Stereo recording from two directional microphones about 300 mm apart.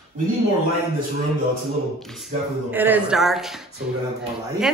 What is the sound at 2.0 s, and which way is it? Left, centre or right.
A woman's voice, centre.